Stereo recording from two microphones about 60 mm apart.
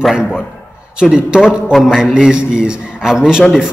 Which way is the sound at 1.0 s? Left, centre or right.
Centre.